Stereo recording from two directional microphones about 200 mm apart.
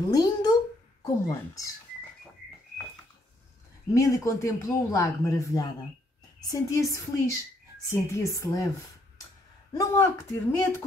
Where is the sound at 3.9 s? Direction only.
15° left (ahead or behind).